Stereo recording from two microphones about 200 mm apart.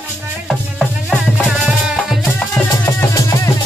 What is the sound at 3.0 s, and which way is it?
Music, 15° left (ahead or behind).